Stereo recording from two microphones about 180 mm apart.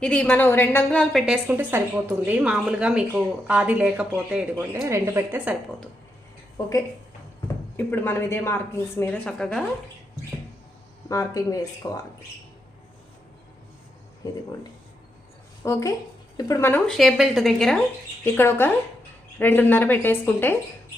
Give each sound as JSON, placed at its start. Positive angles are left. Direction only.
{"t": 0.0, "sound": "a woman's voice", "side_deg": 5}
{"t": 4.5, "sound": "a woman's voice", "side_deg": -15}
{"t": 7.8, "sound": "a woman's voice", "side_deg": 10}
{"t": 11.1, "sound": "speech", "side_deg": 20}
{"t": 15.6, "sound": "a woman's voice", "side_deg": 15}